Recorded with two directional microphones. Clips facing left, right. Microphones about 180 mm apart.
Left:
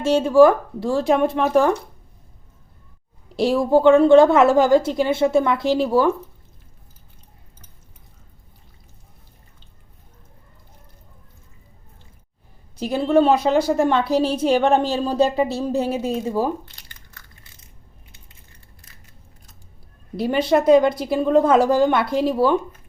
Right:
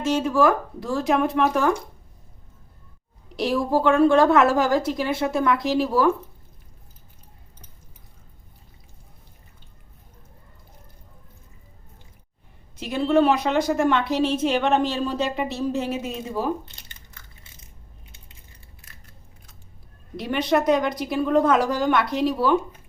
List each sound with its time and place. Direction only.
0.0 s a woman's voice: 30° left (ahead or behind)
3.3 s a woman's voice: 25° left (ahead or behind)
12.7 s a woman's voice: 35° left (ahead or behind)
16.6 s crushing: 20° right (ahead or behind)
20.1 s a woman's voice: 30° left (ahead or behind)